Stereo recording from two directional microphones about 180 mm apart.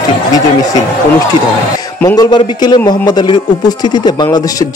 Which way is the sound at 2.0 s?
20° left (ahead or behind).